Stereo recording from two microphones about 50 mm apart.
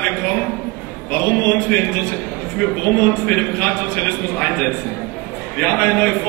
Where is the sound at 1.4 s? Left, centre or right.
Left.